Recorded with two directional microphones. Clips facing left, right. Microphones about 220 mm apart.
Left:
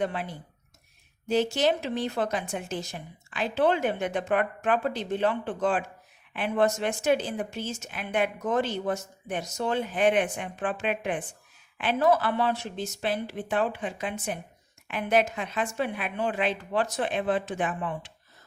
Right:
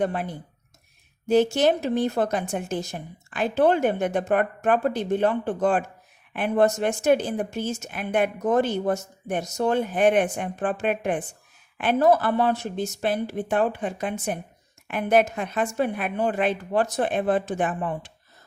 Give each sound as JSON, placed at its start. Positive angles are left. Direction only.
{"t": 0.0, "sound": "speech", "side_deg": -50}